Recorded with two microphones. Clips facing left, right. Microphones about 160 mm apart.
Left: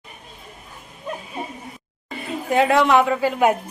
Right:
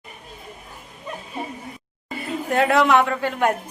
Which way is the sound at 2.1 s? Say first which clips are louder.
Left 1 dB; centre (ahead or behind).